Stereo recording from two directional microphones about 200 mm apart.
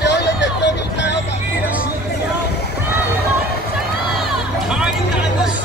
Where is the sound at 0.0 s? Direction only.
60° left (ahead or behind).